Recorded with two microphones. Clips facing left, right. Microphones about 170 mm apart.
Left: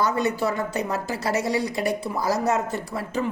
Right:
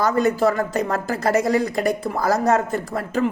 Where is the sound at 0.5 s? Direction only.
45° right (ahead or behind).